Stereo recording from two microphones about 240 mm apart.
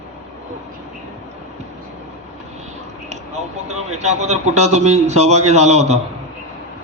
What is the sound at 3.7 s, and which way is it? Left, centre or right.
A man's voice, right.